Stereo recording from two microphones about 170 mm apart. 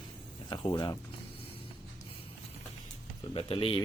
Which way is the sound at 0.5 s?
25° left (ahead or behind).